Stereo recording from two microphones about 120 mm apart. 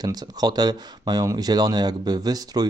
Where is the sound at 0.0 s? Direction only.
35° right (ahead or behind).